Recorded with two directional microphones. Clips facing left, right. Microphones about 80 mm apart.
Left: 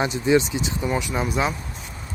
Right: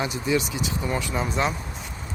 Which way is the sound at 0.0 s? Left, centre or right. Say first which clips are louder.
Left 5 dB; left.